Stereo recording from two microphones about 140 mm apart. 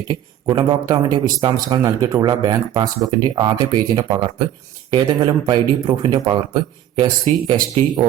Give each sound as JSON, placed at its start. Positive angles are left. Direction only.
{"t": 0.1, "sound": "speech", "side_deg": -35}